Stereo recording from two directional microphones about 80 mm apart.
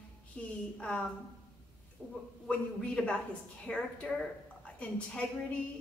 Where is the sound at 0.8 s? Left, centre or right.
Centre.